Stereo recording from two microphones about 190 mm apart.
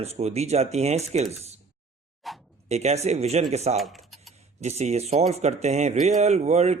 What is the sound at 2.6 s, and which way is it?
Speech, 35° right (ahead or behind).